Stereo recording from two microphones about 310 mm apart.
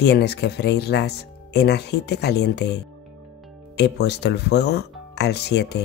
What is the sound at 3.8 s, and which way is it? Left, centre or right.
Speech, left.